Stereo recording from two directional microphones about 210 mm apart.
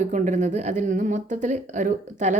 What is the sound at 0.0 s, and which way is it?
A woman's voice, 35° right (ahead or behind).